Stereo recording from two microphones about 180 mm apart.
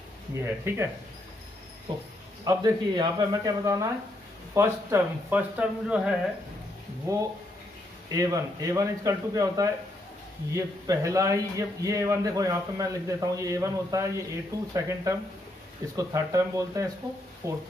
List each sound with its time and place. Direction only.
0.3 s a man's voice: 15° right (ahead or behind)
1.9 s a man's voice: 25° right (ahead or behind); by 6.1 s 5° right (ahead or behind)
8.1 s a man's voice: 20° right (ahead or behind)